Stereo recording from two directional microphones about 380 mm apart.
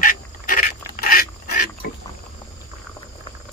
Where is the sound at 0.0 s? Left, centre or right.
Left.